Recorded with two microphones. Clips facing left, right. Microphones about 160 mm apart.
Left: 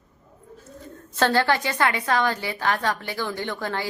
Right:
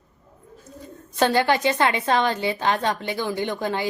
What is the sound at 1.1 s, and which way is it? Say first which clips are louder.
A woman's voice: right 1 dB; 15° right (ahead or behind).